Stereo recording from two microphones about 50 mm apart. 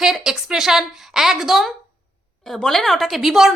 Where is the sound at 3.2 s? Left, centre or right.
Centre.